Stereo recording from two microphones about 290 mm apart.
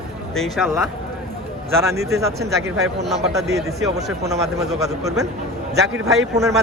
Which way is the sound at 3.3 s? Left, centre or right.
Right.